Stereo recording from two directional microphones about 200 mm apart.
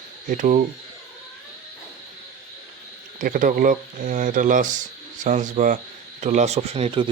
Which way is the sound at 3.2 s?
40° right (ahead or behind).